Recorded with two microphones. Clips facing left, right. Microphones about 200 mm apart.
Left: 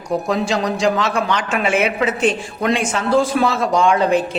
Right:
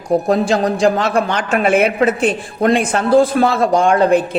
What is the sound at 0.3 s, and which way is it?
Speech, 50° right (ahead or behind).